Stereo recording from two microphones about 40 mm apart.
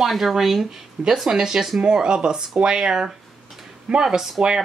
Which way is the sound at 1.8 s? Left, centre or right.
Right.